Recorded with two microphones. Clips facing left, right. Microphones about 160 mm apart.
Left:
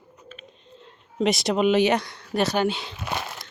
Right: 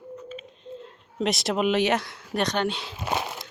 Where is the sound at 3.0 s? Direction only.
15° right (ahead or behind).